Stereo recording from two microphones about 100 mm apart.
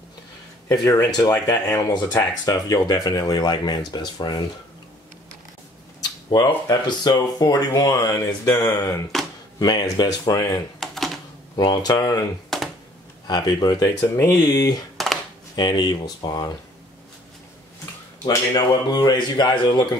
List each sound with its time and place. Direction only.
0.7 s speech: 35° left (ahead or behind)
6.3 s speech: 45° left (ahead or behind)
9.1 s a sound: centre (ahead or behind)
9.6 s speech: 45° left (ahead or behind)
10.8 s typing: centre (ahead or behind)
11.5 s speech: 45° left (ahead or behind)
12.5 s computer keyboard: centre (ahead or behind)
13.3 s speech: 45° left (ahead or behind)
15.0 s a sound: centre (ahead or behind)
15.5 s speech: 45° left (ahead or behind)
18.2 s speech: 45° left (ahead or behind)